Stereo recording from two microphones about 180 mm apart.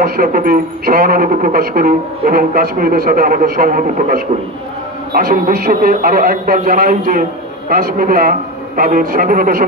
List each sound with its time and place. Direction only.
0.0 s speech: 55° right (ahead or behind)